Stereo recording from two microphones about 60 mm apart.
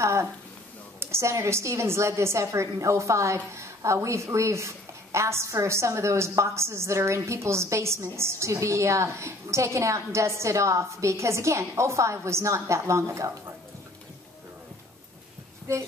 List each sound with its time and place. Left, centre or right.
0.0 s a woman's voice: right